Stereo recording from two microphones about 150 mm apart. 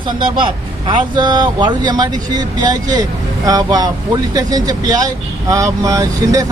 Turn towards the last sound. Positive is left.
turn(degrees=-25)  # may be behind; listen again after turning